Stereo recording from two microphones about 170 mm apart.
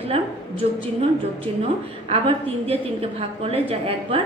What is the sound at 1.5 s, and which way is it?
A woman's voice, 35° right (ahead or behind).